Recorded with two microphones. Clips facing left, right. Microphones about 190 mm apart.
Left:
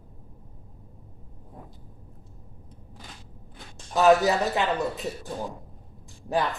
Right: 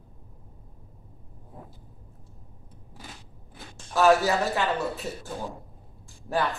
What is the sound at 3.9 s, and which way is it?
Speech, 20° left (ahead or behind).